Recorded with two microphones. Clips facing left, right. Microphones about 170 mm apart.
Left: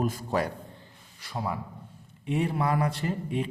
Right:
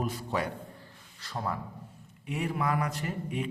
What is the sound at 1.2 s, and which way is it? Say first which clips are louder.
Speech: left 2 dB; 10° left (ahead or behind).